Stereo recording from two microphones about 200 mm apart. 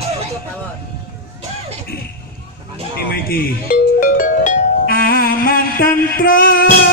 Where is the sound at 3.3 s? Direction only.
45° left (ahead or behind).